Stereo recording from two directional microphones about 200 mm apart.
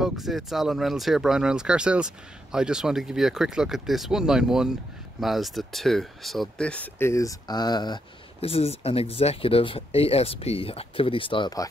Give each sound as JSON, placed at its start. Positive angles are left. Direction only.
{"t": 0.0, "sound": "speech", "side_deg": 0}